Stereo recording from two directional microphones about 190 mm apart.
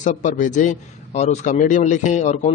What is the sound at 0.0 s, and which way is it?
A man's voice, 40° left (ahead or behind).